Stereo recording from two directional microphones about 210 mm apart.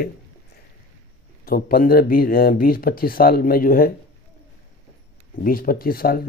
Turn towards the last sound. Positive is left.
turn(degrees=45)  # may be behind; listen again after turning